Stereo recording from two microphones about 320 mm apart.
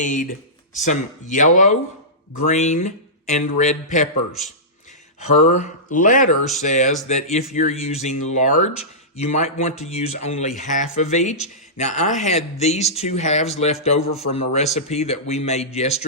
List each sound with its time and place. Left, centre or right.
0.0 s a man's voice: left
5.4 s a man's voice: left